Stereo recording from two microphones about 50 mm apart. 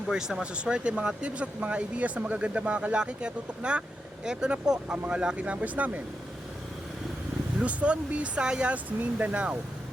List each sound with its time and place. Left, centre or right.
0.1 s speech: centre
0.5 s speech: right
7.6 s speech: right
8.7 s speech: right